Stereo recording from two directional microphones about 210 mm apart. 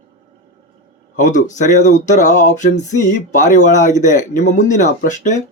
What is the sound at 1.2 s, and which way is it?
Speech, 35° left (ahead or behind).